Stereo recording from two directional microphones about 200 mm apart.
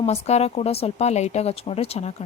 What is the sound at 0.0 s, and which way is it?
Speech, 30° left (ahead or behind).